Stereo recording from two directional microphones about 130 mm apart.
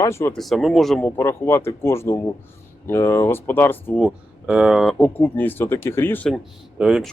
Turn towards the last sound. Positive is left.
turn(degrees=-5)  # may be behind; listen again after turning